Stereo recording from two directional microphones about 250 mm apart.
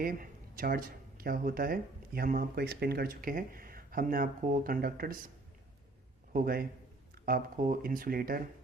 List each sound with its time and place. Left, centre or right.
0.0 s speech: right
6.3 s speech: right